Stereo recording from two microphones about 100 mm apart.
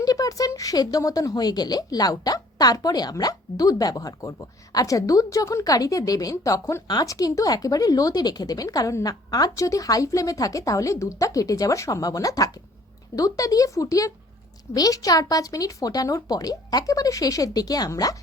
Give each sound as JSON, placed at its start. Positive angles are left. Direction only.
{"t": 0.0, "sound": "speech", "side_deg": 35}